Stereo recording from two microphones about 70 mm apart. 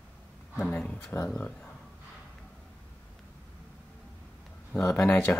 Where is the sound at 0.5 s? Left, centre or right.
Centre.